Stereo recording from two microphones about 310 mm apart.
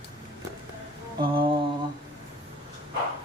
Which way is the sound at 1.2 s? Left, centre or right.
Centre.